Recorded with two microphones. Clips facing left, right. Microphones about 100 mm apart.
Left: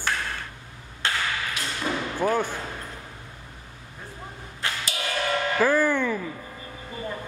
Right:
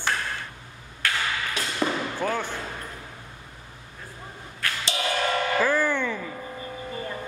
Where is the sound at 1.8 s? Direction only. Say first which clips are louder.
Right 3 dB; 50° right (ahead or behind).